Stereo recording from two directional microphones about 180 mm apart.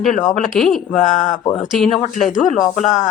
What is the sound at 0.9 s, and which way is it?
Speech, 40° left (ahead or behind).